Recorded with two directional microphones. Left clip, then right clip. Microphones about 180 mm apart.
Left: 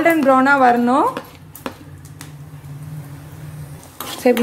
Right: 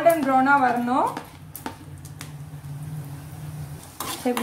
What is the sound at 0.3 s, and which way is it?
Speech, 50° left (ahead or behind).